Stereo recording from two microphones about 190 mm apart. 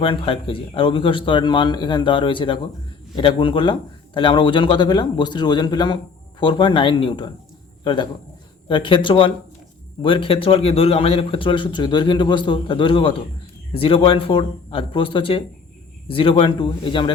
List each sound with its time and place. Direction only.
0.0 s a man's voice: 25° left (ahead or behind)
8.6 s a man's voice: 25° left (ahead or behind)